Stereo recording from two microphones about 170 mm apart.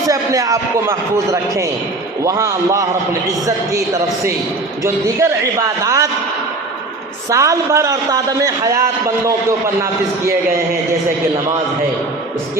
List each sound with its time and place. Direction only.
0.1 s a man's voice: 20° right (ahead or behind)
7.3 s a man's voice: 20° right (ahead or behind)